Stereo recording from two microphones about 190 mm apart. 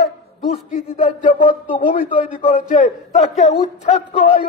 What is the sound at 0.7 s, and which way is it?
A man's voice, 40° left (ahead or behind).